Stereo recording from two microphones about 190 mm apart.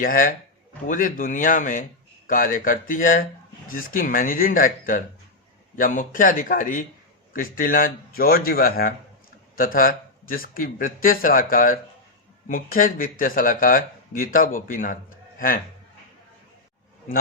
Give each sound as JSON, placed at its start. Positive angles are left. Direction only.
{"t": 0.0, "sound": "speech", "side_deg": 50}